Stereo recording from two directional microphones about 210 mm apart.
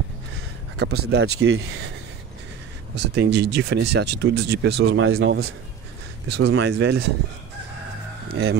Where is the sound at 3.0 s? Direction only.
55° right (ahead or behind); by 5.5 s 75° right (ahead or behind).